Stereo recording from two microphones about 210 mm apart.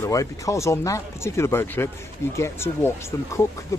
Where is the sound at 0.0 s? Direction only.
15° left (ahead or behind).